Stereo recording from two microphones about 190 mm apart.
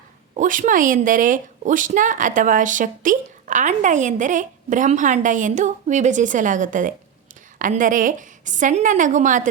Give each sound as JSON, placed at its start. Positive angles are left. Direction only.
{"t": 0.3, "sound": "a woman's voice", "side_deg": -40}